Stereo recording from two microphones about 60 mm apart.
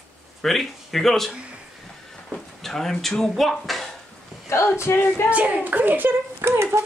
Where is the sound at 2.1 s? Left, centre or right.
Centre.